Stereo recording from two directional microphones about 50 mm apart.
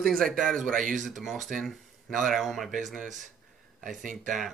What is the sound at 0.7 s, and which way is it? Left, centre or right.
Speech, centre.